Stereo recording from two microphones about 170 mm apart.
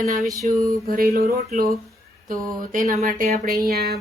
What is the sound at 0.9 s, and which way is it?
Speech, 60° right (ahead or behind).